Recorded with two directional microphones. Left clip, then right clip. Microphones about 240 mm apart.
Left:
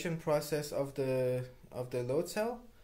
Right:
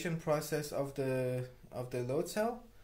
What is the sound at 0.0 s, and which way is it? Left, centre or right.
Speech, centre.